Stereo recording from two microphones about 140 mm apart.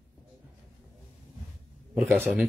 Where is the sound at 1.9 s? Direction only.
15° right (ahead or behind).